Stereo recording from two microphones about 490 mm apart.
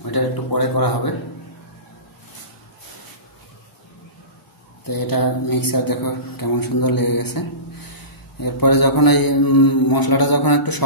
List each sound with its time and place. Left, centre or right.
0.0 s a man's voice: left
4.8 s a man's voice: left